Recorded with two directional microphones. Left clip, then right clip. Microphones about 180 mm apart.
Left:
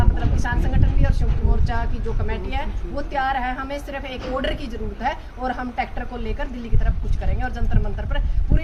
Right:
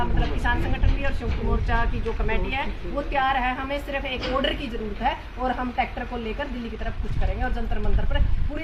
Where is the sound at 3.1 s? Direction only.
10° left (ahead or behind).